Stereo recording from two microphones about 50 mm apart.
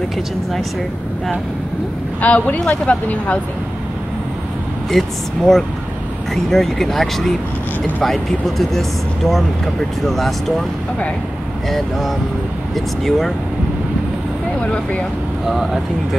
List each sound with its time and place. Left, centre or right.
2.2 s speech: left
4.9 s speech: centre
12.7 s speech: centre
14.6 s speech: left
15.4 s speech: centre